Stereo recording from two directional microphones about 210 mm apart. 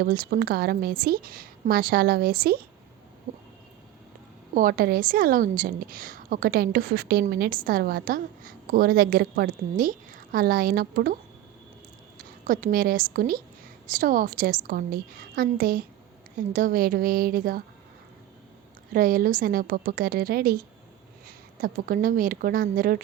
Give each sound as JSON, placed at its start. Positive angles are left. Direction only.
{"t": 0.0, "sound": "a woman's voice", "side_deg": -45}
{"t": 4.5, "sound": "a woman's voice", "side_deg": -45}
{"t": 18.9, "sound": "a woman's voice", "side_deg": -40}